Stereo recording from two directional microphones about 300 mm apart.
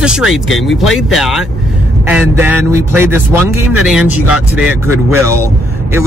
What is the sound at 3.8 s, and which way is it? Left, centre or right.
Speech, centre.